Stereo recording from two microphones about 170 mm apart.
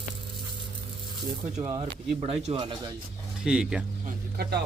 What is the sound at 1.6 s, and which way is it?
Speech, 20° right (ahead or behind).